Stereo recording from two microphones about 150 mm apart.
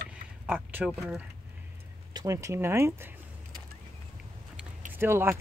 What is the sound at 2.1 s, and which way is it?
Speech, 25° right (ahead or behind).